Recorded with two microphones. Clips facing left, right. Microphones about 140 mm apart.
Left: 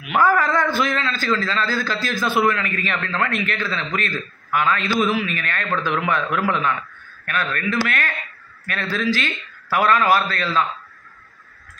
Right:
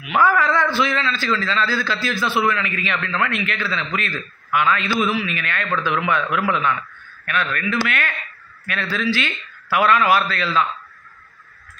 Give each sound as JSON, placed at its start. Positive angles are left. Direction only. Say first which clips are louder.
{"t": 0.2, "sound": "a man's voice", "louder": "even", "side_deg": 45}